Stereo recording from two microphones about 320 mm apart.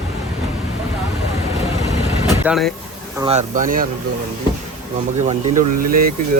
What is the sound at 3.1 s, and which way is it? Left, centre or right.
Speech, centre.